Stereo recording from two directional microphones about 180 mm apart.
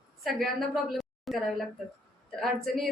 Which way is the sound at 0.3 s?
Centre (ahead or behind).